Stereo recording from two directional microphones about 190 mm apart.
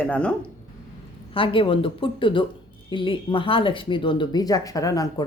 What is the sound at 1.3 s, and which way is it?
Speech, 30° left (ahead or behind).